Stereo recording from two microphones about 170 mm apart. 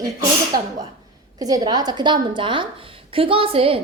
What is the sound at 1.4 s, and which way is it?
A woman's voice, 20° right (ahead or behind).